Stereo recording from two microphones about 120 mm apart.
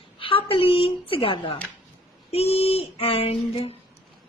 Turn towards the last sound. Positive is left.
turn(degrees=55)  # may be behind; listen again after turning